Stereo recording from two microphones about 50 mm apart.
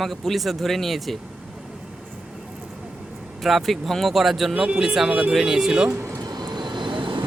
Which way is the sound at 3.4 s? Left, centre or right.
Centre.